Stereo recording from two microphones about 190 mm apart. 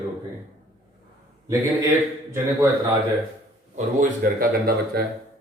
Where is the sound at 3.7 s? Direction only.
45° right (ahead or behind).